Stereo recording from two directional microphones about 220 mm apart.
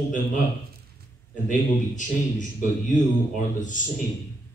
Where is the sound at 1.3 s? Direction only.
35° left (ahead or behind).